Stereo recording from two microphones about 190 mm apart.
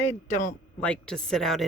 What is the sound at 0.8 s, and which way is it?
Speech, 5° left (ahead or behind).